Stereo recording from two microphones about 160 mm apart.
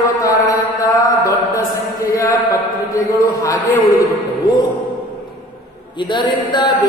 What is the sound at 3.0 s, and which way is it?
Chant, 20° left (ahead or behind).